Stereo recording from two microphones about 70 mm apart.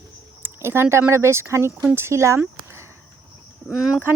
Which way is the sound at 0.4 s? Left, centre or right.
Right.